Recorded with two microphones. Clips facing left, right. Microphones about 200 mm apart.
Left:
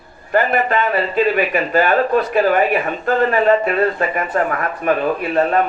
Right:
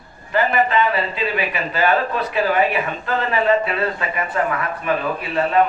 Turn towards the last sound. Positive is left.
turn(degrees=45)  # may be behind; listen again after turning